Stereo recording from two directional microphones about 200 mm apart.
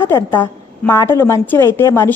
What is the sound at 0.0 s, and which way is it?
A woman's voice, 15° left (ahead or behind).